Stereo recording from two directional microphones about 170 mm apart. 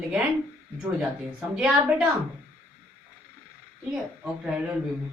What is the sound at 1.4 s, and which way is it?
Speech, 5° right (ahead or behind).